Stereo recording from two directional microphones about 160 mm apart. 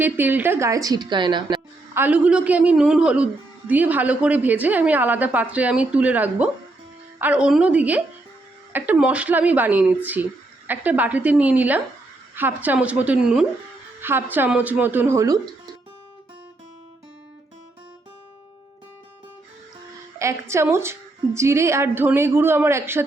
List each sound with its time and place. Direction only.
0.0 s a woman's voice: 10° right (ahead or behind); by 1.6 s 30° right (ahead or behind)
1.9 s a woman's voice: 10° right (ahead or behind)
20.1 s a woman's voice: 15° right (ahead or behind)